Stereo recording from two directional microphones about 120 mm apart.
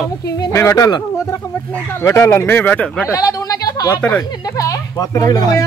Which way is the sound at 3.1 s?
30° left (ahead or behind).